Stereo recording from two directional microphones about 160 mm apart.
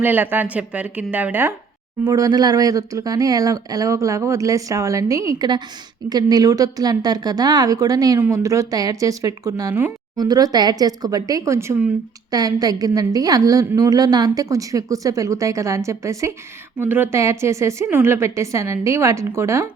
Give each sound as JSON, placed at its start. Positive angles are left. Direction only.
{"t": 0.0, "sound": "speech", "side_deg": -10}
{"t": 2.0, "sound": "a woman's voice", "side_deg": -25}